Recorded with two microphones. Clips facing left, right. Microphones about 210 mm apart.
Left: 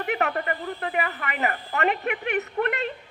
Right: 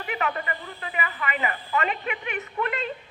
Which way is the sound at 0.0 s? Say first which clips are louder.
Left 3 dB; 60° left (ahead or behind).